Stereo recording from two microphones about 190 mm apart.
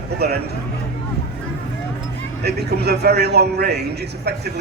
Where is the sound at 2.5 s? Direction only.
60° right (ahead or behind).